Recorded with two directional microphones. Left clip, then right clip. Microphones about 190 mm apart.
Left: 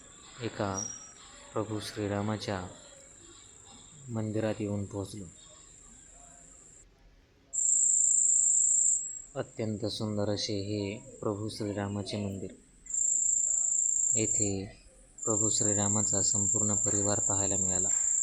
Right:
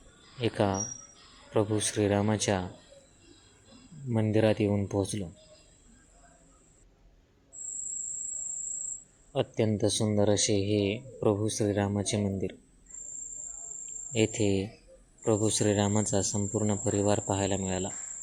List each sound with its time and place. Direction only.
0.4 s cricket: 20° right (ahead or behind)
4.1 s speech: 20° right (ahead or behind)
9.3 s cricket: 15° right (ahead or behind)
14.1 s cricket: 15° right (ahead or behind)